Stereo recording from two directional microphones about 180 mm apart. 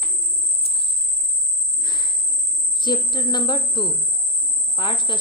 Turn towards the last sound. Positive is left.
turn(degrees=25)  # may be behind; listen again after turning